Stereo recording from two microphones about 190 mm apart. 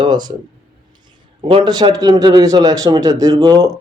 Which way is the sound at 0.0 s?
25° right (ahead or behind).